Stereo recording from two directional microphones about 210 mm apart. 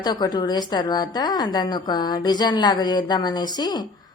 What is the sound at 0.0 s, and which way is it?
A woman's voice, 20° left (ahead or behind).